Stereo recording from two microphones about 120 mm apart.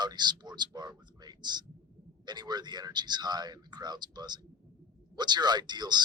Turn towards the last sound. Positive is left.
turn(degrees=-35)  # may be behind; listen again after turning